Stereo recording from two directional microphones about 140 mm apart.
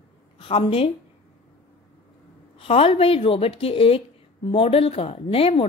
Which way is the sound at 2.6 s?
40° left (ahead or behind).